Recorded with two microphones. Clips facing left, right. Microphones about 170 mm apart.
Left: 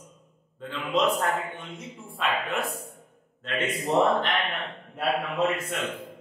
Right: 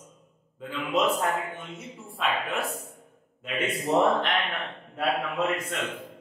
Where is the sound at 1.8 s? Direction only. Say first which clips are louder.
Even; centre (ahead or behind).